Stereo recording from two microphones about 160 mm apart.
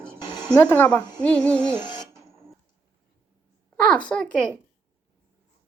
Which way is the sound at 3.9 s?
5° left (ahead or behind).